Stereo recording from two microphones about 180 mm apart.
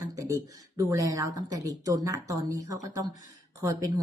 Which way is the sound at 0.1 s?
20° right (ahead or behind).